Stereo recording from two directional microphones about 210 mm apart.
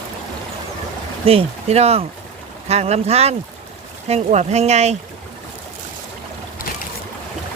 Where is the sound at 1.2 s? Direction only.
25° right (ahead or behind).